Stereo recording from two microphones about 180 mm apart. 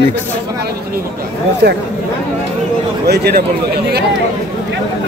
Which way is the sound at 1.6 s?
60° right (ahead or behind).